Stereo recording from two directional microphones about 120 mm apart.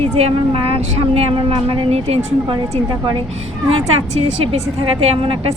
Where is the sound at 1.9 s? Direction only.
60° right (ahead or behind).